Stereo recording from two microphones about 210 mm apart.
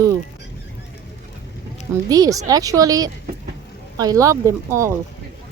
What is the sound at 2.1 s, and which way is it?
Speech, 15° right (ahead or behind).